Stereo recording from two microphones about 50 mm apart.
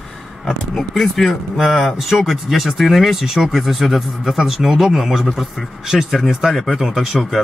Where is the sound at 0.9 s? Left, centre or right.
Centre.